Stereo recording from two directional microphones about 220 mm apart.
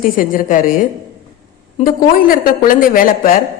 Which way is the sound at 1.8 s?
40° left (ahead or behind).